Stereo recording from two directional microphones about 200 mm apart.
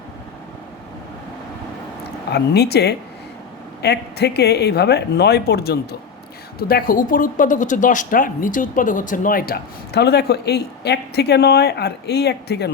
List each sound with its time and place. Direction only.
2.3 s speech: 55° left (ahead or behind)